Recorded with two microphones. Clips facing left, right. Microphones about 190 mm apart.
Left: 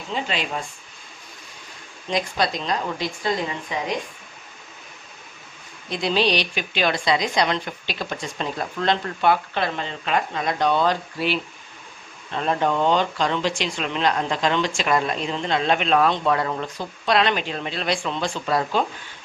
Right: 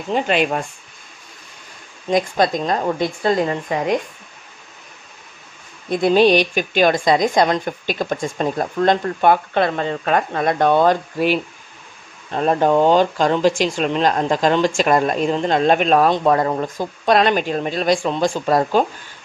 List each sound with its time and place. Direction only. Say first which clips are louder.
0.1 s speech: right 9 dB; 55° right (ahead or behind)
2.0 s a woman's voice: right 6 dB; 50° right (ahead or behind)
5.9 s a woman's voice: right 8 dB; 50° right (ahead or behind)